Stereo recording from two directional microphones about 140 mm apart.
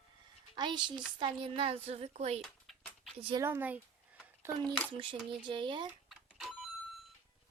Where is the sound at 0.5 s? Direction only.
30° right (ahead or behind); by 2.4 s 50° right (ahead or behind).